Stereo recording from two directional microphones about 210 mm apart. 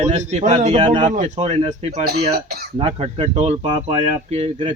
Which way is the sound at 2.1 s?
50° right (ahead or behind).